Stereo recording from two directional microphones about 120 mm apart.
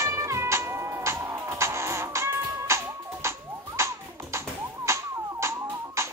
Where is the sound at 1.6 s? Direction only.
25° right (ahead or behind).